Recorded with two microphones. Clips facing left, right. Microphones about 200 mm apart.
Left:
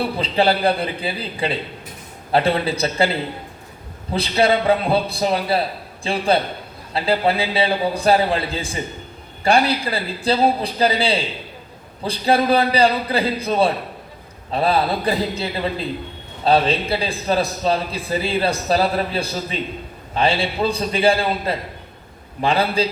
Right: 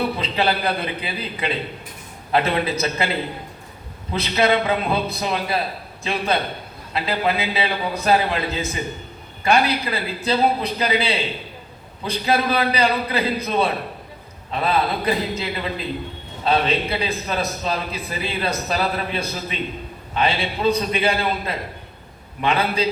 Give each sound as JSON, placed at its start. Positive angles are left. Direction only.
{"t": 0.2, "sound": "a man's voice", "side_deg": 30}
{"t": 4.1, "sound": "a man's voice", "side_deg": 30}